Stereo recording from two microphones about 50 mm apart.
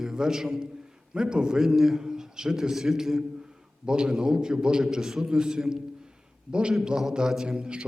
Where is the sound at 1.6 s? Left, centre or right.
Centre.